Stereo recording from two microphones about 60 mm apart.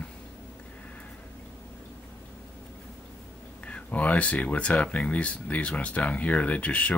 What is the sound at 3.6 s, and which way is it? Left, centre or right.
Speech, left.